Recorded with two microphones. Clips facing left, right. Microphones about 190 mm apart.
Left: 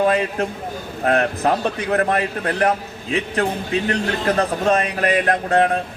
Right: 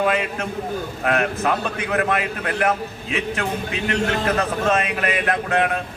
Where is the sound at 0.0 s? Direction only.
35° left (ahead or behind).